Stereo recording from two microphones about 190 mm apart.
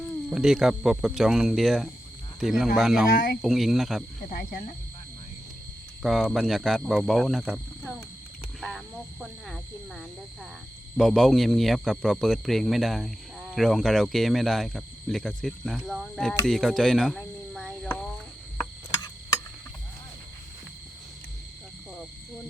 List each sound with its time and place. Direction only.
0.3 s a man's voice: 5° right (ahead or behind)
3.1 s speech: 50° left (ahead or behind)
3.4 s a man's voice: centre (ahead or behind)
4.3 s speech: 50° left (ahead or behind)
6.0 s a man's voice: centre (ahead or behind)
9.2 s a man's voice: centre (ahead or behind)
16.5 s a sound: centre (ahead or behind)